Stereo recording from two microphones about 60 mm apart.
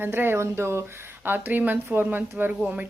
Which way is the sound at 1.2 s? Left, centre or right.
Right.